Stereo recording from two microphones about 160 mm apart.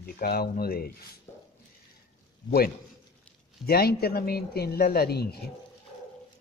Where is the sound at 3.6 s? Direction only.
75° left (ahead or behind).